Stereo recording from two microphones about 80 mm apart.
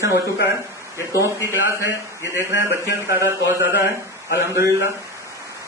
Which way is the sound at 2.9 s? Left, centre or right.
Right.